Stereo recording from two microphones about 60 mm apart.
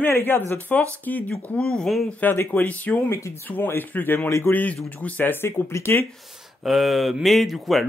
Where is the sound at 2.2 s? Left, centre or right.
Left.